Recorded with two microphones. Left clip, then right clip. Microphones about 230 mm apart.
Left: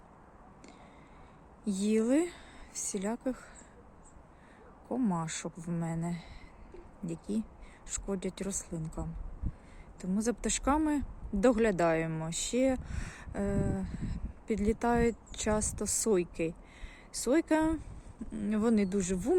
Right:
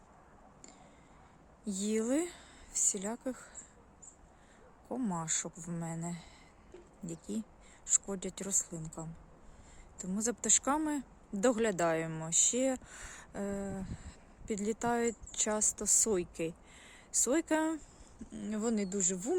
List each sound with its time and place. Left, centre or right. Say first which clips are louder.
1.6 s speech: left 4 dB; centre
4.9 s speech: left 3 dB; centre